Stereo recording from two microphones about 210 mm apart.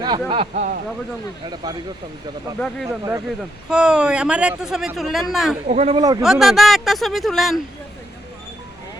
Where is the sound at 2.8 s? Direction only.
15° right (ahead or behind).